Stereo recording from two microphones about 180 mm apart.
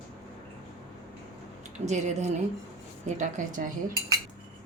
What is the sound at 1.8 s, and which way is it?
A woman's voice, 40° right (ahead or behind).